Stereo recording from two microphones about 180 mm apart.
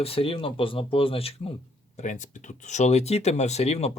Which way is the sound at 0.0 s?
30° left (ahead or behind).